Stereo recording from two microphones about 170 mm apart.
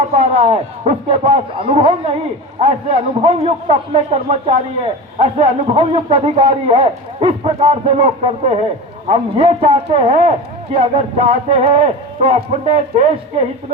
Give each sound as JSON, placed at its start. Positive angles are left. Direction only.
{"t": 0.1, "sound": "a man's voice", "side_deg": -35}